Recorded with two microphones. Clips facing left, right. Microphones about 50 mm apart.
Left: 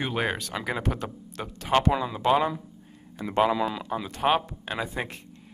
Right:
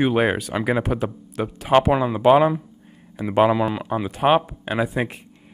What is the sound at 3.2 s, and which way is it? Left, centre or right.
Speech, centre.